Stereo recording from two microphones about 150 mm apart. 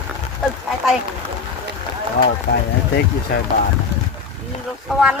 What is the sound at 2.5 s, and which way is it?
Speech, 85° left.